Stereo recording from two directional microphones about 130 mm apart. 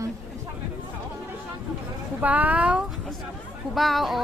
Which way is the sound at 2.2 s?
10° right (ahead or behind).